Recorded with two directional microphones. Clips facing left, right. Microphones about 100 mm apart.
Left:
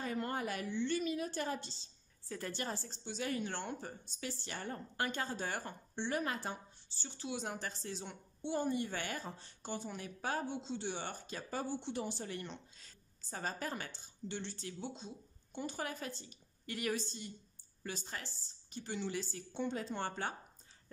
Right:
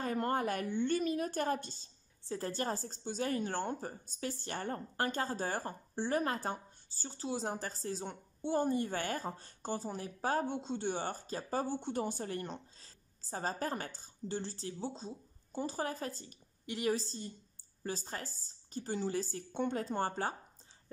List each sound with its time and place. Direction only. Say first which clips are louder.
0.0 s a woman's voice: right 5 dB; 45° right (ahead or behind)
2.2 s a woman's voice: right 5 dB; 30° right (ahead or behind)
16.6 s a woman's voice: right 4 dB; 25° right (ahead or behind)